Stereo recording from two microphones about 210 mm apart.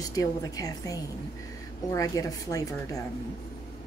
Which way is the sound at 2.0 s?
15° left (ahead or behind).